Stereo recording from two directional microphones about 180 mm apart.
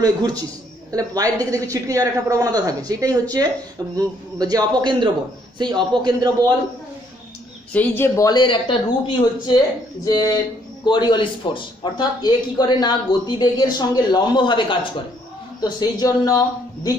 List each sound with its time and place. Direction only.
0.0 s a man's voice: 20° right (ahead or behind)
7.7 s a man's voice: 10° left (ahead or behind)